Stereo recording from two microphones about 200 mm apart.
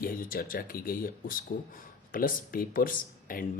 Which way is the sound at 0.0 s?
45° left (ahead or behind).